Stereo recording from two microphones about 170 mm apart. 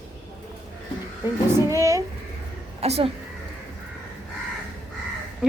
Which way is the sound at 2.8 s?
35° right (ahead or behind).